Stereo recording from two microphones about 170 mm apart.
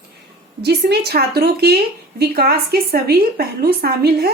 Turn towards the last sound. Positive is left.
turn(degrees=-65)  # may be behind; listen again after turning